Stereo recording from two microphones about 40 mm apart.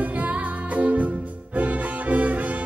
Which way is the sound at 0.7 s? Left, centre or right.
Right.